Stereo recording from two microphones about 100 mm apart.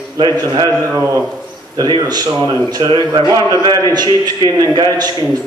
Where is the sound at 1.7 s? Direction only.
40° right (ahead or behind).